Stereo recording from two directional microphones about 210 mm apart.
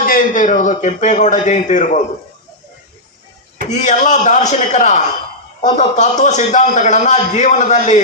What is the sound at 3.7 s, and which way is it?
A man's voice, 35° left (ahead or behind).